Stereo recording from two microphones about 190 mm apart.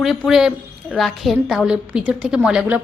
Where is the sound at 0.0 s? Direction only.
Centre (ahead or behind).